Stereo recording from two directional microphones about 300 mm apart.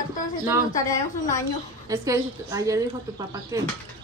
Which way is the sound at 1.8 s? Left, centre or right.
Centre.